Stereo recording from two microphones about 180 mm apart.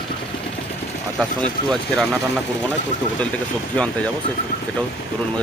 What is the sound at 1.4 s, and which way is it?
Speech, 5° left (ahead or behind).